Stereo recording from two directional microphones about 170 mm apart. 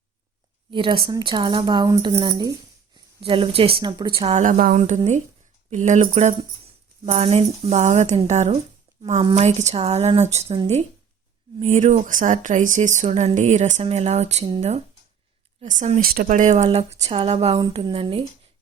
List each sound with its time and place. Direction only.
0.7 s speech: 30° right (ahead or behind)
4.4 s a woman's voice: 50° right (ahead or behind)
15.6 s speech: 50° right (ahead or behind)
16.0 s speech: 60° right (ahead or behind); by 18.2 s 30° right (ahead or behind)